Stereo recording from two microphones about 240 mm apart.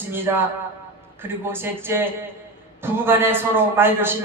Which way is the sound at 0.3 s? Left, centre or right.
Centre.